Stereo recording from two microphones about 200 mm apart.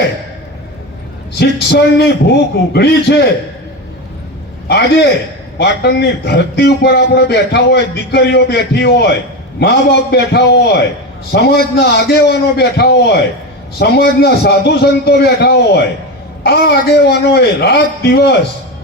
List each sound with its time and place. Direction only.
1.4 s a man's voice: 55° left (ahead or behind)
5.5 s a man's voice: 55° left (ahead or behind)